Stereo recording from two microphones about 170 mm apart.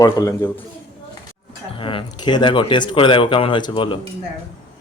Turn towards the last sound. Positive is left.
turn(degrees=30)  # may be behind; listen again after turning